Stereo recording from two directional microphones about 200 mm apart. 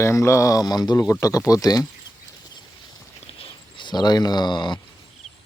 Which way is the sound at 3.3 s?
25° left (ahead or behind).